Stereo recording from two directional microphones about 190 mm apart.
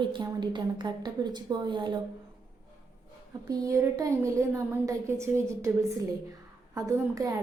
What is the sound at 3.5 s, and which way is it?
A woman's voice, 20° right (ahead or behind).